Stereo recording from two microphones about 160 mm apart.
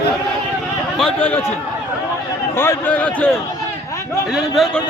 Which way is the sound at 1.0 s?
10° left (ahead or behind).